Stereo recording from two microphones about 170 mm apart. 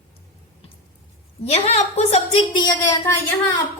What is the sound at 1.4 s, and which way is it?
Speech, 40° left (ahead or behind).